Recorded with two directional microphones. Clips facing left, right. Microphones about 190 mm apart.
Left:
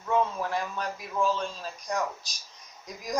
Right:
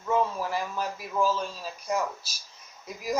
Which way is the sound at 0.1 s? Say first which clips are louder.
Even; 5° right (ahead or behind).